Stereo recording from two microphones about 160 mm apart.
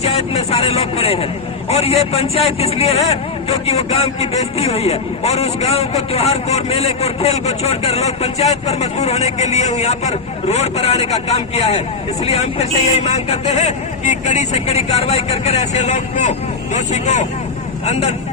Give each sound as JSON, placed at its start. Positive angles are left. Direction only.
{"t": 0.0, "sound": "a man's voice", "side_deg": 40}